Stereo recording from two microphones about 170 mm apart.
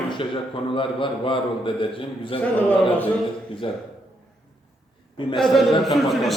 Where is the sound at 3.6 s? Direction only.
30° left (ahead or behind).